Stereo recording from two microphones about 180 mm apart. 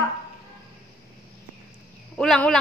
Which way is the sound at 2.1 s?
5° left (ahead or behind).